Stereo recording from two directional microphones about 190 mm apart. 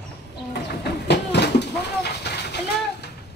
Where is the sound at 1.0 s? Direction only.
60° left (ahead or behind).